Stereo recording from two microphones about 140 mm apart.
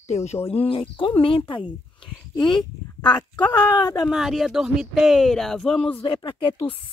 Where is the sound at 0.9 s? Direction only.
40° left (ahead or behind).